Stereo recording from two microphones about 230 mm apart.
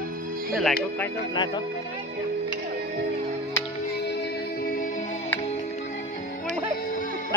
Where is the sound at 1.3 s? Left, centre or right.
Centre.